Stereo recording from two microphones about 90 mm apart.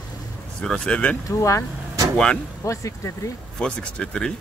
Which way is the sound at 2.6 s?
35° left (ahead or behind).